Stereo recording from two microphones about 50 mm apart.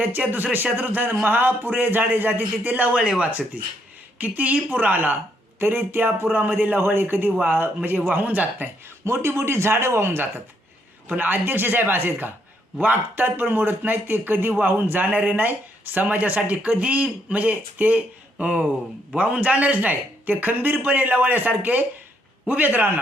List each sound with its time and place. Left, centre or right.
0.3 s speech: right
5.5 s speech: right
7.3 s speech: right
9.0 s speech: right
11.2 s speech: right